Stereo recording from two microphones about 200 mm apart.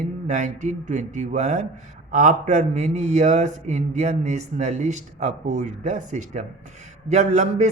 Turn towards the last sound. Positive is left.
turn(degrees=-35)  # may be behind; listen again after turning